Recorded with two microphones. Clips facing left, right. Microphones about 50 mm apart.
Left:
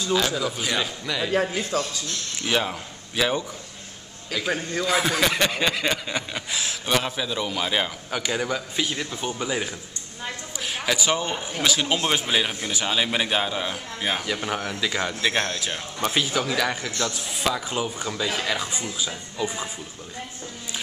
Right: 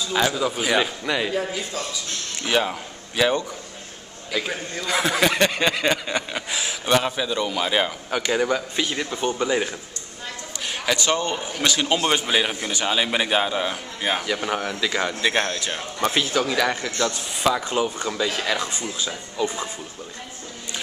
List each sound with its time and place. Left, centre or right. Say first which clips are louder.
0.1 s a man's voice: right 2 dB; centre
1.3 s a man's voice: left 3 dB; left
2.4 s speech: right 2 dB; centre
4.8 s snicker: right 2 dB; centre
8.3 s a man's voice: right 5 dB; centre
9.3 s snicker: right 5 dB; centre
10.7 s a man's voice: right 1 dB; centre
11.6 s snicker: right 2 dB; centre
18.6 s speech: right 1 dB; centre